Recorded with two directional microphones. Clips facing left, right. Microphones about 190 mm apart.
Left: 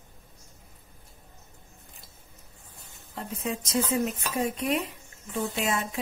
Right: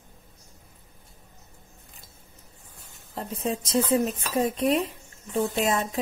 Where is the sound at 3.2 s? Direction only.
35° right (ahead or behind).